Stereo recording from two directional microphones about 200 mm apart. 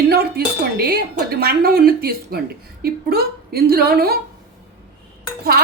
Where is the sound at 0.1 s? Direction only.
50° right (ahead or behind).